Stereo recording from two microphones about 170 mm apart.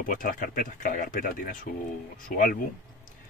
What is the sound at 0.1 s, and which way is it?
Speech, 55° left (ahead or behind).